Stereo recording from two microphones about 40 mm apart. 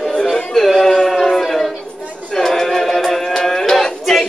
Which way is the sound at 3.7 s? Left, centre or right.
Centre.